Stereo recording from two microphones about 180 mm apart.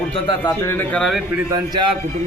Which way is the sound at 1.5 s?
25° right (ahead or behind).